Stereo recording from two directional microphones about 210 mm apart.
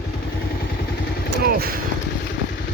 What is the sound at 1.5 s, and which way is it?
Vehicle, 45° right (ahead or behind).